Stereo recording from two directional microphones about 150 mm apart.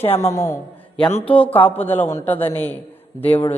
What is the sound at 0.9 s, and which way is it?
A woman's voice, 5° left (ahead or behind).